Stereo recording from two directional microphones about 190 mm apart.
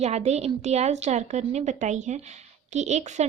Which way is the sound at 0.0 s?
35° right (ahead or behind).